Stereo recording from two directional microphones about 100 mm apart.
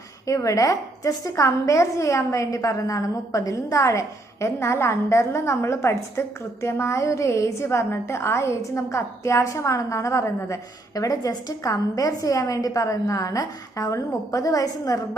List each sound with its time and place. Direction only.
0.3 s a woman's voice: 35° left (ahead or behind)